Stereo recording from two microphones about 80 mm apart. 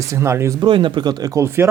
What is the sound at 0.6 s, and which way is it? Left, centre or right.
Speech, right.